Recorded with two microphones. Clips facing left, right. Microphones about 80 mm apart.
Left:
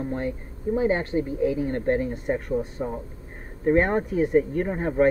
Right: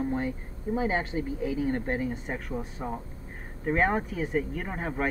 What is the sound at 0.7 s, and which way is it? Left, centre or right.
Speech, centre.